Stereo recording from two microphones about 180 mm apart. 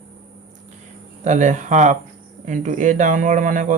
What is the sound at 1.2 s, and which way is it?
Speech, 45° right (ahead or behind).